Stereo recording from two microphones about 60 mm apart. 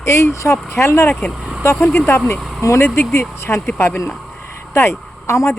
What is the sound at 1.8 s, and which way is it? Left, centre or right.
Speech, left.